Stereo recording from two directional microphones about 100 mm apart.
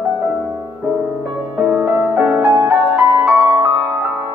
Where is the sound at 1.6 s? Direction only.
20° right (ahead or behind).